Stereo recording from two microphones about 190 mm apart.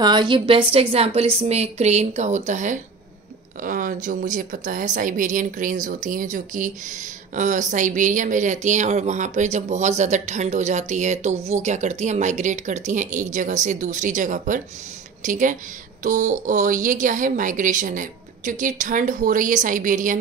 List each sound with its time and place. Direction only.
0.0 s a woman's voice: 20° right (ahead or behind); by 20.2 s 45° right (ahead or behind)